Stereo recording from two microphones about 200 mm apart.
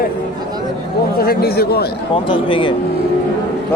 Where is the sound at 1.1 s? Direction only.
50° left (ahead or behind).